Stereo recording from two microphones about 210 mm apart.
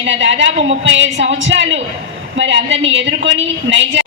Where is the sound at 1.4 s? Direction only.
60° right (ahead or behind).